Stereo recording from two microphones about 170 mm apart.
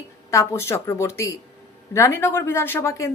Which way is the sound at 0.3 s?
15° left (ahead or behind).